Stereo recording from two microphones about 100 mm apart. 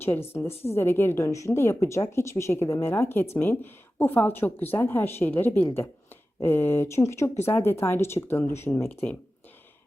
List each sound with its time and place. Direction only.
0.0 s speech: 25° left (ahead or behind)